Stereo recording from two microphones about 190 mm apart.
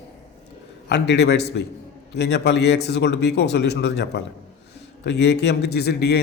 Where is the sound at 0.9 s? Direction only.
65° left (ahead or behind).